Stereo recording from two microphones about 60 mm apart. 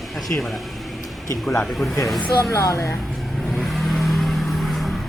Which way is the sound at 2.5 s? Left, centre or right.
Left.